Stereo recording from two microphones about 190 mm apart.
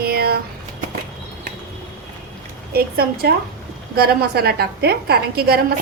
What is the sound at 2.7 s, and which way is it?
A woman's voice, 55° right (ahead or behind).